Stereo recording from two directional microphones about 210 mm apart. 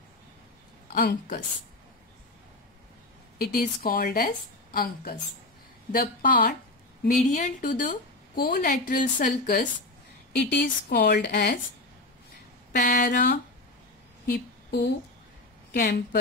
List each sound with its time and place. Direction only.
0.9 s a woman's voice: 40° left (ahead or behind)
3.3 s a woman's voice: 45° left (ahead or behind)
10.5 s a woman's voice: 50° left (ahead or behind)
12.7 s a woman's voice: 45° left (ahead or behind)
14.2 s a sound: 50° left (ahead or behind)
15.7 s a woman's voice: 50° left (ahead or behind)